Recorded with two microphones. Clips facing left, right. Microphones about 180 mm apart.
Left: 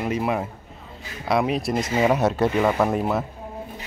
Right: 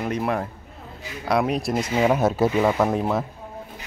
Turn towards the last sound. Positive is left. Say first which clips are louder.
# even
turn(degrees=0)  # may be behind; listen again after turning